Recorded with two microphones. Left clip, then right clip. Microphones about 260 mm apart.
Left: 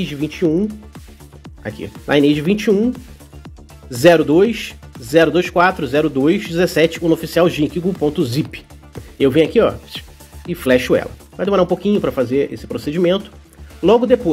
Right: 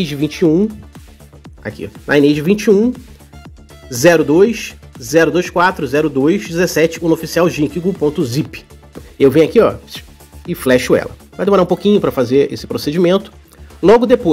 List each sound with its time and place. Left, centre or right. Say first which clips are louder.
0.0 s speech: right 4 dB; centre
0.9 s speech: even; centre
3.9 s speech: right 1 dB; centre